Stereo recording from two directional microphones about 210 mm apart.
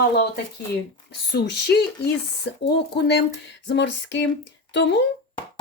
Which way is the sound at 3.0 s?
55° left (ahead or behind).